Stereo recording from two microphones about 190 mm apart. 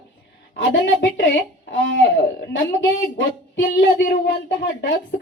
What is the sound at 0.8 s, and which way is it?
A woman's voice, 75° left (ahead or behind).